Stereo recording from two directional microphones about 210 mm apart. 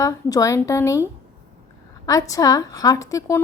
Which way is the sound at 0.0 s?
15° left (ahead or behind).